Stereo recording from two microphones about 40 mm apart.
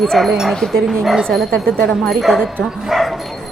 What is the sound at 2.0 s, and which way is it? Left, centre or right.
Speech, centre.